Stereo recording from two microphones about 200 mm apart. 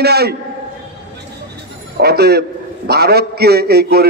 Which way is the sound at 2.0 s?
55° right (ahead or behind).